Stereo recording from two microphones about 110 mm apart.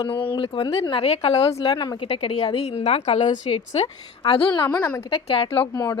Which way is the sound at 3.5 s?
55° left (ahead or behind).